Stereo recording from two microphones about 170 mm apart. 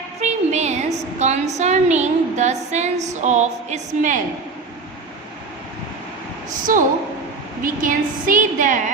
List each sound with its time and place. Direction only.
0.2 s a woman's voice: 40° right (ahead or behind)
6.5 s a woman's voice: 50° right (ahead or behind)